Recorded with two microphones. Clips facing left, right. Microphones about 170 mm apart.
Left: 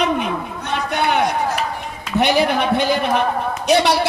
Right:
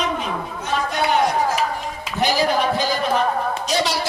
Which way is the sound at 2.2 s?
65° left (ahead or behind).